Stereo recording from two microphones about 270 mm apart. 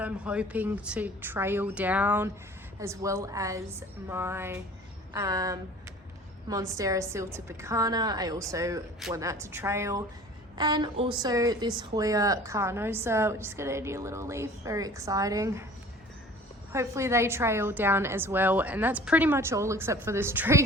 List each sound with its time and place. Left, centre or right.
0.0 s a woman's voice: centre
16.7 s a woman's voice: centre